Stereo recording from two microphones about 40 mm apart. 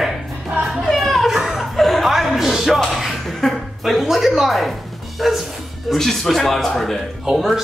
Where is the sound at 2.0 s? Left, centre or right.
Centre.